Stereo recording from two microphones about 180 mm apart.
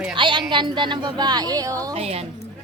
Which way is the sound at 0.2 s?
25° right (ahead or behind).